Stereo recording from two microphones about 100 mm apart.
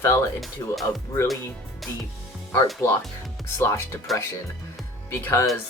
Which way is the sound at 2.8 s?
30° left (ahead or behind).